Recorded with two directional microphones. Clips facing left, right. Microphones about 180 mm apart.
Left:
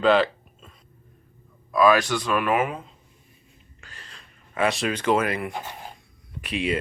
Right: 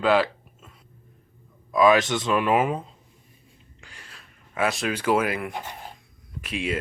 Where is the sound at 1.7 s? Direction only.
20° right (ahead or behind).